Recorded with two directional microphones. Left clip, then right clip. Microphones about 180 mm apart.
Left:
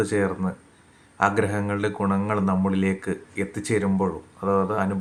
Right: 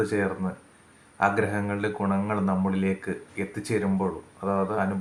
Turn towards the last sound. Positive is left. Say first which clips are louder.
# left 3 dB
turn(degrees=30)  # may be behind; listen again after turning